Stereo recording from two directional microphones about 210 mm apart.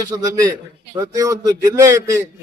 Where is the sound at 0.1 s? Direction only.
15° right (ahead or behind).